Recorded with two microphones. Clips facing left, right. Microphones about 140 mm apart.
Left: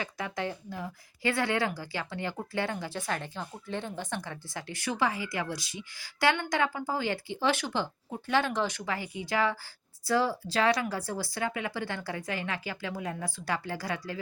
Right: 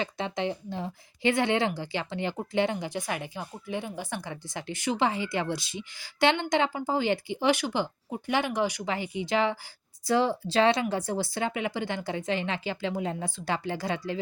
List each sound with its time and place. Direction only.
0.0 s a woman's voice: 25° right (ahead or behind)